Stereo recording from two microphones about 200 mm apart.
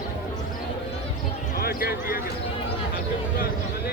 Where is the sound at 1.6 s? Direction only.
50° left (ahead or behind).